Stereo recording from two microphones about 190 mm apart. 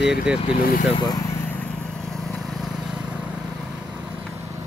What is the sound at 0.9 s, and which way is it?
Speech, 20° left (ahead or behind).